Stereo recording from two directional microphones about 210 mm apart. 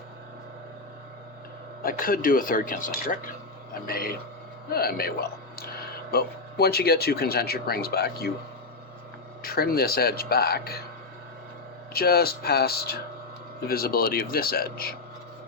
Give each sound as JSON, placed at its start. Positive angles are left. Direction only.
{"t": 1.8, "sound": "speech", "side_deg": 45}
{"t": 9.4, "sound": "speech", "side_deg": 45}
{"t": 11.9, "sound": "speech", "side_deg": 45}